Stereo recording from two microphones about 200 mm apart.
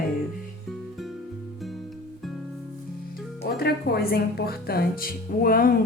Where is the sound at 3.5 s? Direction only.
50° left (ahead or behind).